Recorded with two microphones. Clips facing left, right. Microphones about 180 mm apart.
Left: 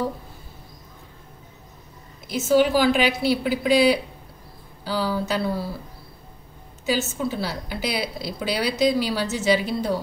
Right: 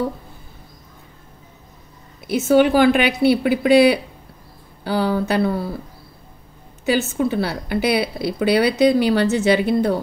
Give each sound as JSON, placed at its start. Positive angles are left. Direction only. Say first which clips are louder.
{"t": 2.2, "sound": "speech", "louder": "right 4 dB", "side_deg": -60}
{"t": 6.9, "sound": "speech", "louder": "right 5 dB", "side_deg": -60}